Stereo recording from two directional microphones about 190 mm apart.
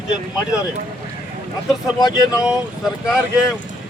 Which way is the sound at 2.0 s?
20° left (ahead or behind).